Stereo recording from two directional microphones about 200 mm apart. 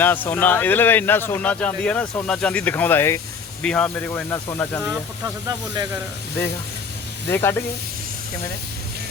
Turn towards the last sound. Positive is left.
turn(degrees=15)  # may be behind; listen again after turning